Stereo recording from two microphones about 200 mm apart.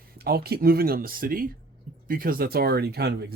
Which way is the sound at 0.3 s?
50° right (ahead or behind).